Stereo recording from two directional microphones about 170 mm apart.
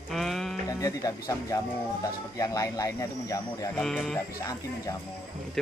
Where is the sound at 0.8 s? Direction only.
20° left (ahead or behind).